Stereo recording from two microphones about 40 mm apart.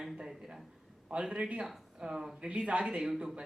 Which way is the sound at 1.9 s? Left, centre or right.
Centre.